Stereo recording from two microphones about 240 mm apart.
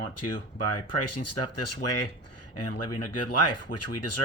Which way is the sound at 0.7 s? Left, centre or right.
Left.